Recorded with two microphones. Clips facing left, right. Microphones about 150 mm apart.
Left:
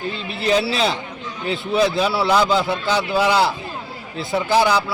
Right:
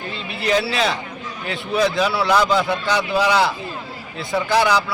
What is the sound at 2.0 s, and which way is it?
A man's voice, 30° left (ahead or behind).